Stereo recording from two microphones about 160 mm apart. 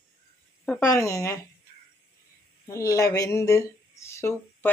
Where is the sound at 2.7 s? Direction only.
20° left (ahead or behind).